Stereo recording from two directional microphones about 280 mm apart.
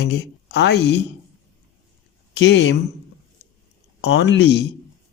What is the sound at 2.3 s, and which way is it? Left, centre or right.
Speech, left.